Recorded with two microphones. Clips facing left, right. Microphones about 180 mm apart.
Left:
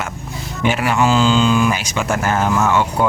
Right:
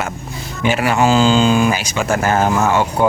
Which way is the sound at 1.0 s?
35° right (ahead or behind).